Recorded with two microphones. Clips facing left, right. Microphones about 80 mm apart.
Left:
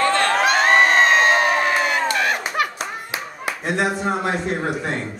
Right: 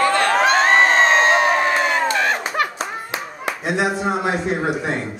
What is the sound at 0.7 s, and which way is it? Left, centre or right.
Crowd, right.